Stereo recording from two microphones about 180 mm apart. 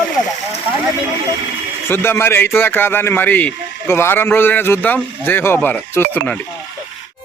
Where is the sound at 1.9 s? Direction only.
15° left (ahead or behind).